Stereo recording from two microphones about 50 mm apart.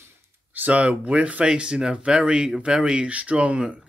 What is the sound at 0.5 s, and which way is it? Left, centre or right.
Speech, right.